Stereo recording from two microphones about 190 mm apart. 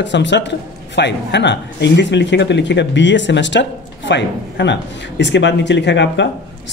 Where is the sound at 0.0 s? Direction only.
70° left (ahead or behind).